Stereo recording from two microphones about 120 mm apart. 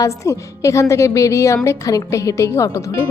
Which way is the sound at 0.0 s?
25° left (ahead or behind).